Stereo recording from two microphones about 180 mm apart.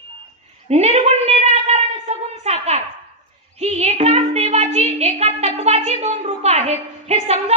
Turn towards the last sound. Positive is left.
turn(degrees=-35)  # may be behind; listen again after turning